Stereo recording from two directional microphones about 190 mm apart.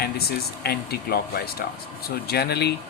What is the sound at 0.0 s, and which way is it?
Speech, 55° left (ahead or behind).